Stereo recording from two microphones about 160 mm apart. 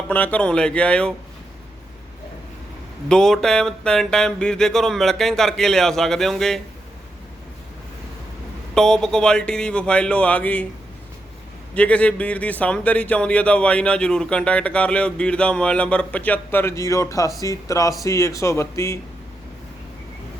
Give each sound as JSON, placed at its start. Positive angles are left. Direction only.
{"t": 0.1, "sound": "speech", "side_deg": 10}
{"t": 3.1, "sound": "speech", "side_deg": 5}
{"t": 8.7, "sound": "speech", "side_deg": 5}
{"t": 11.7, "sound": "speech", "side_deg": 10}